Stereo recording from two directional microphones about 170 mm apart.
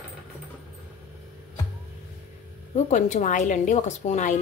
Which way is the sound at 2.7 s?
45° left (ahead or behind).